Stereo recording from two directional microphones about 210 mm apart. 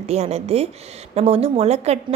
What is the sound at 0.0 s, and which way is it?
A woman's voice, 30° right (ahead or behind).